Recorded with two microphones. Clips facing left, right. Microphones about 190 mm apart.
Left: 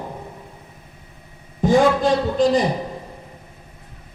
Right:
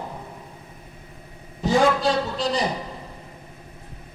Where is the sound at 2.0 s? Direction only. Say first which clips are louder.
Left 6 dB; 50° left (ahead or behind).